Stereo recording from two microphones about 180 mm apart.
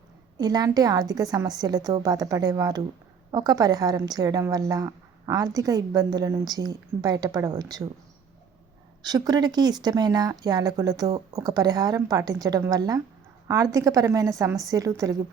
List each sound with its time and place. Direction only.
0.3 s a woman's voice: 20° right (ahead or behind)
9.0 s a woman's voice: 20° right (ahead or behind)